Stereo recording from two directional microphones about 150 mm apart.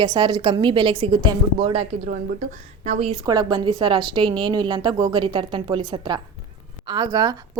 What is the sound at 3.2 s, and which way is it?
A woman's voice, 30° right (ahead or behind).